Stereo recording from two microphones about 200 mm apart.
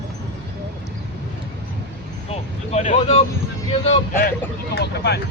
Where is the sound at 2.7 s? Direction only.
35° left (ahead or behind).